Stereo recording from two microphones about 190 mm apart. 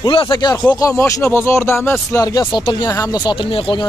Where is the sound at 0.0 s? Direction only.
25° left (ahead or behind).